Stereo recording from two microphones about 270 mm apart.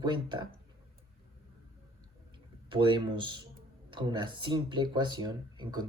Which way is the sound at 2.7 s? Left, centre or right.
Centre.